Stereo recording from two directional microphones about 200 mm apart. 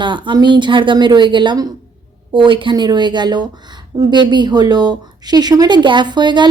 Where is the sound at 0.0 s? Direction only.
25° right (ahead or behind).